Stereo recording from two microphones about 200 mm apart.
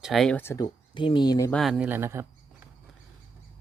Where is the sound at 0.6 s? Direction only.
25° left (ahead or behind).